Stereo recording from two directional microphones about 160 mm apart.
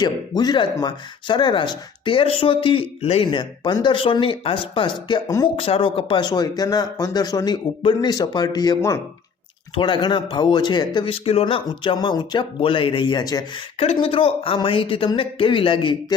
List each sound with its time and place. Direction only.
0.0 s speech: 25° left (ahead or behind)
5.5 s speech: 35° left (ahead or behind)
13.7 s speech: 35° left (ahead or behind)